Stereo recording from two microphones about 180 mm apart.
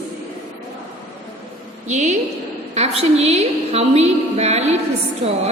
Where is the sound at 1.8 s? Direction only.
40° right (ahead or behind).